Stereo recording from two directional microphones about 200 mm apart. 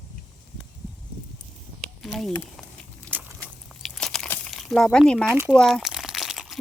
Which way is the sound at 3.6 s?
Centre (ahead or behind).